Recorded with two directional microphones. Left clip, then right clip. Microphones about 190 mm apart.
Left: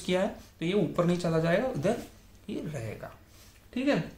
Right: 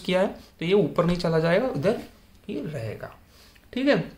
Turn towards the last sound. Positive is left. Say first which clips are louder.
# right 6 dB
turn(degrees=-25)  # may be behind; listen again after turning